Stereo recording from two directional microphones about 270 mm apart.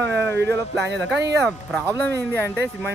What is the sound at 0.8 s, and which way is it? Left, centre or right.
Speech, right.